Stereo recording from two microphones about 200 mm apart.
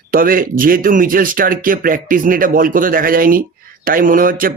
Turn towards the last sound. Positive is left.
turn(degrees=-45)  # may be behind; listen again after turning